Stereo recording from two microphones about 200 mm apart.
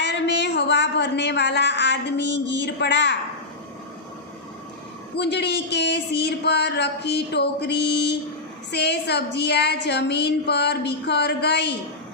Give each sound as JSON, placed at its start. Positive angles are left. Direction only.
{"t": 0.0, "sound": "speech", "side_deg": 60}
{"t": 5.1, "sound": "speech", "side_deg": 55}